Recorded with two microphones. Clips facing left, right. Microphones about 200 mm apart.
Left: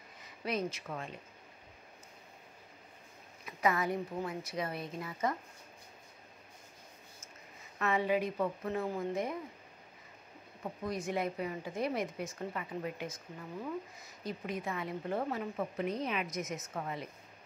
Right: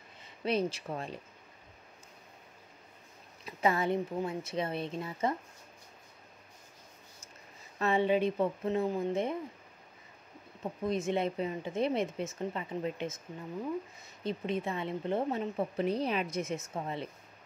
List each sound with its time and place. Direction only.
0.2 s speech: 30° right (ahead or behind)
3.4 s a woman's voice: 30° right (ahead or behind)
7.8 s a woman's voice: 30° right (ahead or behind)
10.6 s a woman's voice: 25° right (ahead or behind)
14.2 s a woman's voice: 25° right (ahead or behind)